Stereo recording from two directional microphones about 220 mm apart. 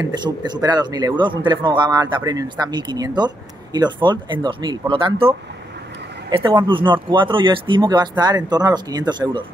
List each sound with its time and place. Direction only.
0.0 s speech: 20° right (ahead or behind)
6.3 s speech: 20° right (ahead or behind)